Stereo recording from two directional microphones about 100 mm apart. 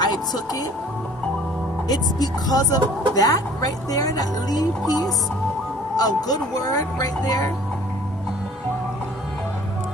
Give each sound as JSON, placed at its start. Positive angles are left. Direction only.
{"t": 0.0, "sound": "music", "side_deg": 45}
{"t": 1.9, "sound": "speech", "side_deg": 40}